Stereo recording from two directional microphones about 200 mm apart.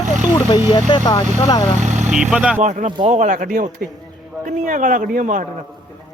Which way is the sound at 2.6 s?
40° right (ahead or behind).